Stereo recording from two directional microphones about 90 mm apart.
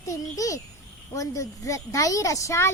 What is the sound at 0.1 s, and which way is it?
Speech, 40° left (ahead or behind).